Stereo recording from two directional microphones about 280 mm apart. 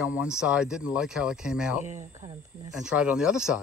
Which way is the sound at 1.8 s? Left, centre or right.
Right.